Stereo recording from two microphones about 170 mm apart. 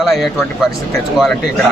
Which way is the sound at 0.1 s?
Centre (ahead or behind).